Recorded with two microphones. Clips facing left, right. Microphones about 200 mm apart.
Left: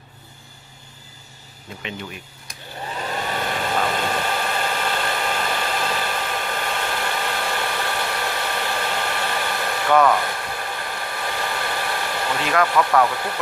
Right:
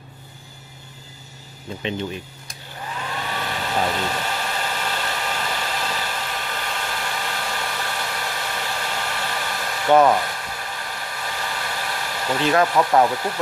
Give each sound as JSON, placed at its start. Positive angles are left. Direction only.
{"t": 1.8, "sound": "speech", "side_deg": -30}
{"t": 2.9, "sound": "hair dryer", "side_deg": 40}
{"t": 9.8, "sound": "rub", "side_deg": -25}
{"t": 10.4, "sound": "hair dryer", "side_deg": 55}
{"t": 12.4, "sound": "speech", "side_deg": -25}